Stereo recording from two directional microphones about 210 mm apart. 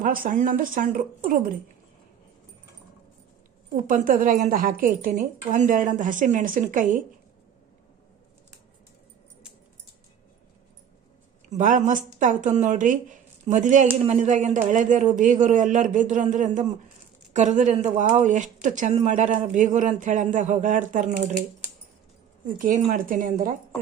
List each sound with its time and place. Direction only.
0.0 s speech: 40° right (ahead or behind)
3.8 s speech: 40° right (ahead or behind)
11.4 s speech: 35° right (ahead or behind)
22.5 s speech: 35° right (ahead or behind)